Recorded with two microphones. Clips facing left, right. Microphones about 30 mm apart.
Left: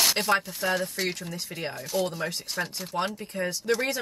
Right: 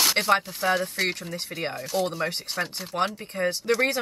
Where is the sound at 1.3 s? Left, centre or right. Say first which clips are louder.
Right 3 dB; right.